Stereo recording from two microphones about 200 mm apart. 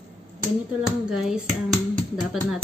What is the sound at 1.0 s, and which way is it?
Speech, centre (ahead or behind).